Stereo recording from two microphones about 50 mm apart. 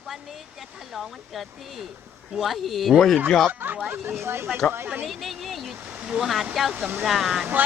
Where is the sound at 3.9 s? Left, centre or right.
Right.